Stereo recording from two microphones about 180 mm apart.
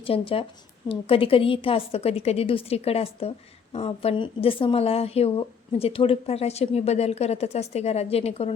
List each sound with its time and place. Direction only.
0.0 s a woman's voice: 30° left (ahead or behind)